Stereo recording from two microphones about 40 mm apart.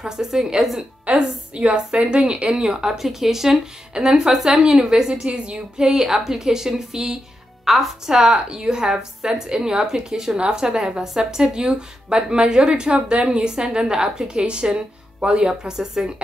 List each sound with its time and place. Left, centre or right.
0.0 s a woman's voice: centre
1.1 s a woman's voice: right